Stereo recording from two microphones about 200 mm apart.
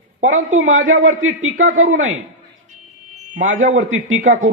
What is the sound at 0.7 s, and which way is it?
Speech, 80° right.